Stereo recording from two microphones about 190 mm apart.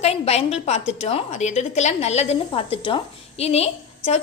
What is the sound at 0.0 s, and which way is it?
A woman's voice, 35° left (ahead or behind).